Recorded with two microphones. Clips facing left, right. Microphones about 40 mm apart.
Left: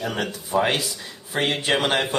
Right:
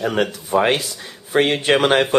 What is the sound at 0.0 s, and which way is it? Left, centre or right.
Speech, right.